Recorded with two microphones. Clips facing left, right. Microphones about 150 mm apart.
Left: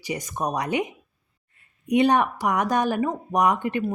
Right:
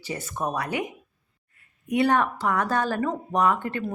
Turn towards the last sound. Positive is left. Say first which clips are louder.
# left 2 dB
turn(degrees=15)  # may be behind; listen again after turning